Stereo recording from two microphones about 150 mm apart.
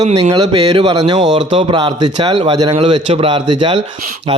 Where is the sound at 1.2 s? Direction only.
50° right (ahead or behind).